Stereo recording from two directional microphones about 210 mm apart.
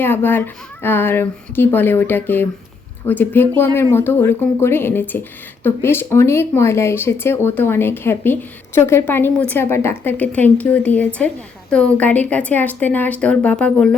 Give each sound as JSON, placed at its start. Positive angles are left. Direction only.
{"t": 0.0, "sound": "speech", "side_deg": 10}